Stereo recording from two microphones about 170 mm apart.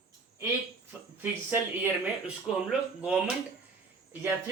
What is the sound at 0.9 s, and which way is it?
Speech, 10° right (ahead or behind).